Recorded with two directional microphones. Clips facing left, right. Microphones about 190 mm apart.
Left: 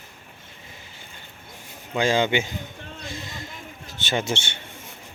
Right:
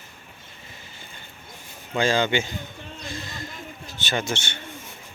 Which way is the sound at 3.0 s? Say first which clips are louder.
Right 1 dB; 20° left (ahead or behind).